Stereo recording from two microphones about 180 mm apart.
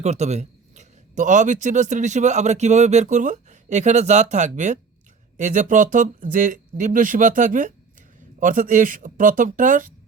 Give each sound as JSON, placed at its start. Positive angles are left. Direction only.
{"t": 0.0, "sound": "speech", "side_deg": -40}